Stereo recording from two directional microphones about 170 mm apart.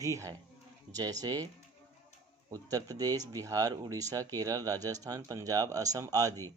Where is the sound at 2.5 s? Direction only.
20° right (ahead or behind).